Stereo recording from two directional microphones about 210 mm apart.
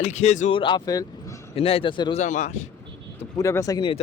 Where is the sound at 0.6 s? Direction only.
20° left (ahead or behind).